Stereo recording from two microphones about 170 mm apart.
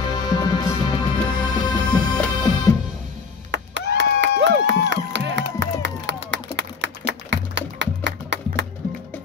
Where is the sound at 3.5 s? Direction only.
90° right.